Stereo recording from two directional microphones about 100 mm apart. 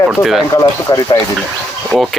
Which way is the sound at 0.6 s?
35° left (ahead or behind).